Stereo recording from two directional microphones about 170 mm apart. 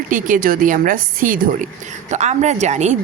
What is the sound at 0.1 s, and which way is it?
A woman's voice, 55° right (ahead or behind).